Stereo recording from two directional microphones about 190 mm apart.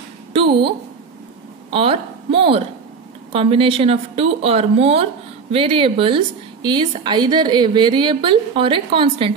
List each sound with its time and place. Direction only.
1.7 s a woman's voice: 30° right (ahead or behind)